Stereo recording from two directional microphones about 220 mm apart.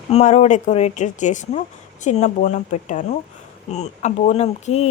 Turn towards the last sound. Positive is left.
turn(degrees=30)  # may be behind; listen again after turning